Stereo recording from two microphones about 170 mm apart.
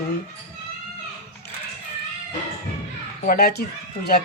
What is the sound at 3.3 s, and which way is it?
Speech, 65° left (ahead or behind).